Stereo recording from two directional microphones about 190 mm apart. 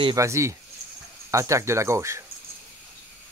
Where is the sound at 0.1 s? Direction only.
15° right (ahead or behind).